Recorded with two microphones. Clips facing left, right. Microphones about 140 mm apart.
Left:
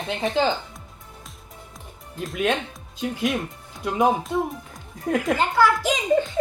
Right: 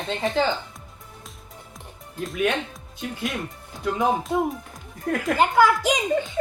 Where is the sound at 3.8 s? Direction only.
15° left (ahead or behind).